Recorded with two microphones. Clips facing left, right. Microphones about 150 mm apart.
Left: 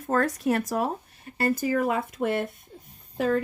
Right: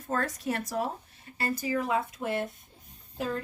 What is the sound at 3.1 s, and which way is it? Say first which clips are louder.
Speech: left 8 dB; 90° left.